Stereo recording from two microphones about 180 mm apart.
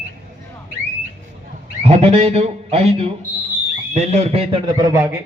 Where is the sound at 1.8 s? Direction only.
35° right (ahead or behind); by 5.1 s 15° right (ahead or behind).